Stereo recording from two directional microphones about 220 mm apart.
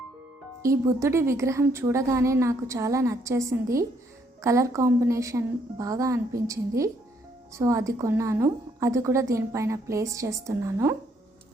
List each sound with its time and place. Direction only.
0.6 s a woman's voice: 15° right (ahead or behind)